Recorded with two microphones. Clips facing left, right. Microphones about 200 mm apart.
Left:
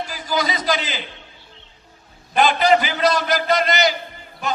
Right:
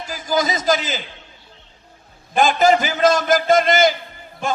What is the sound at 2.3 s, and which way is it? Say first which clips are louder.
A man's voice: right 1 dB; 45° right (ahead or behind).